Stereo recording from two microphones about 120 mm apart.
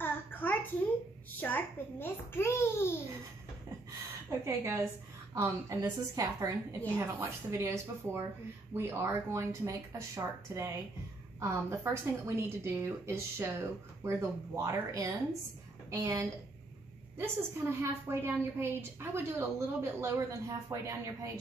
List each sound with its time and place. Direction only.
0.0 s a sound: 15° left (ahead or behind)
1.4 s a child's voice: 15° left (ahead or behind)
4.3 s a woman's voice: 25° right (ahead or behind)